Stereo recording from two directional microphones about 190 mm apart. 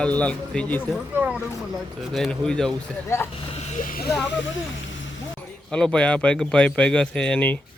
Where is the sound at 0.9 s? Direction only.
5° right (ahead or behind).